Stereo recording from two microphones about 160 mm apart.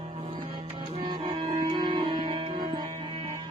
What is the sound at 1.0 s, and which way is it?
Music, 30° right (ahead or behind).